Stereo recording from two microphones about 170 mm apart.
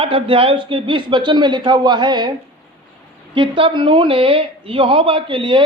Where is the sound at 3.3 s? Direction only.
30° right (ahead or behind).